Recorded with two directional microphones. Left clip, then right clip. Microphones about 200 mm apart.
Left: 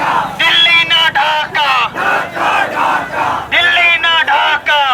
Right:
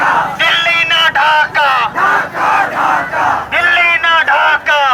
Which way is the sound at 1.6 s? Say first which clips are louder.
Right 1 dB; 20° left (ahead or behind).